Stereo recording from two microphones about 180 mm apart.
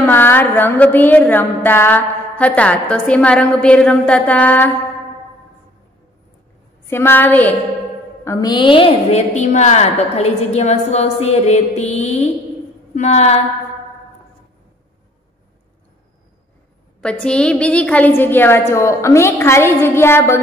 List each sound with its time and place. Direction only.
0.0 s music: 10° left (ahead or behind)
6.9 s music: 10° left (ahead or behind)
8.2 s a woman's voice: 20° left (ahead or behind); by 13.4 s 40° left (ahead or behind)
17.0 s music: 5° left (ahead or behind)